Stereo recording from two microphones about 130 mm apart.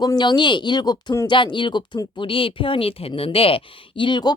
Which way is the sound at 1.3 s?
40° left (ahead or behind).